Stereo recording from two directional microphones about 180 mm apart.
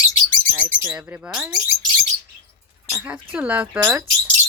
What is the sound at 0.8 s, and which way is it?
Speech, 10° right (ahead or behind).